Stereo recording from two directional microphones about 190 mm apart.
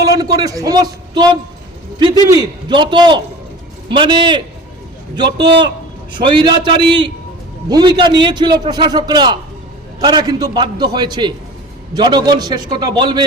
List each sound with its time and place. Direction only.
0.0 s a man's voice: 20° right (ahead or behind)
2.3 s a man's voice: 20° right (ahead or behind)